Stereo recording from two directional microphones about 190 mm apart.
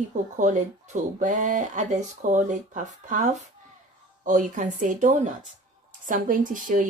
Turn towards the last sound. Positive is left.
turn(degrees=-45)  # may be behind; listen again after turning